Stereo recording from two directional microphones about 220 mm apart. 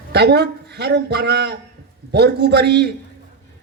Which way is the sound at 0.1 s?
50° right (ahead or behind).